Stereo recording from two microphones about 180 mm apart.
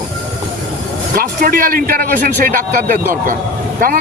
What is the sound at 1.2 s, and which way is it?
Speech, 50° right (ahead or behind).